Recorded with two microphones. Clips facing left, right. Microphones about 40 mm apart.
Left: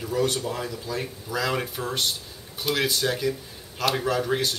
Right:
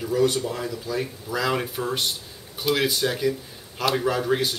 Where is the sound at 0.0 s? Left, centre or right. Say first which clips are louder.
Right 3 dB; centre.